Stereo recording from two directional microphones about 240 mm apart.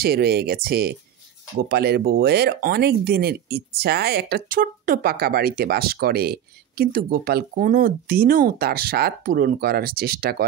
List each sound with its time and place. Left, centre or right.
0.0 s speech: right